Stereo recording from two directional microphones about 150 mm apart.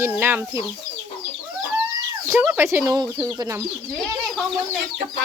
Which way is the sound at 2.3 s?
15° right (ahead or behind).